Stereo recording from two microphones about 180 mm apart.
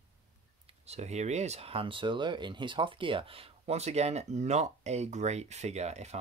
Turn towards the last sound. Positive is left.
turn(degrees=-40)  # may be behind; listen again after turning